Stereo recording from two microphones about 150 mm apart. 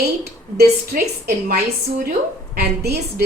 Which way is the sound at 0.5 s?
90° right.